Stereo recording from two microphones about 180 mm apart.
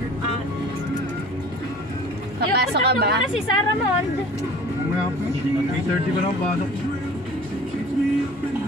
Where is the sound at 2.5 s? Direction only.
65° right (ahead or behind).